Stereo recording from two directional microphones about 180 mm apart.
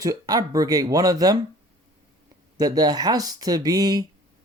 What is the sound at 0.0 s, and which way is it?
Speech, 20° right (ahead or behind).